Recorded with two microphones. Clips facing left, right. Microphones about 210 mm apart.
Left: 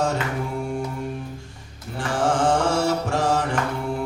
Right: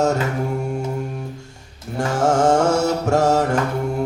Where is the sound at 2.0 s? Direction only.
45° right (ahead or behind).